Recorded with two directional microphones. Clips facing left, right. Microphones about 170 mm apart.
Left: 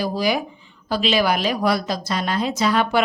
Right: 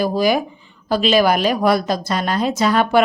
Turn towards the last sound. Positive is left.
turn(degrees=-50)  # may be behind; listen again after turning